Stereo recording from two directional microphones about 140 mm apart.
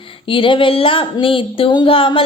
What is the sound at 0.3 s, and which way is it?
A woman's voice, 40° left (ahead or behind).